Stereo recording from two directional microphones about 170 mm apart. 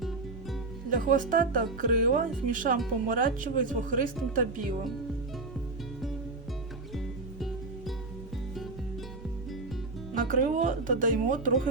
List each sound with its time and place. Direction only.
0.9 s speech: 50° right (ahead or behind)
6.9 s music: centre (ahead or behind)
10.2 s speech: 50° right (ahead or behind)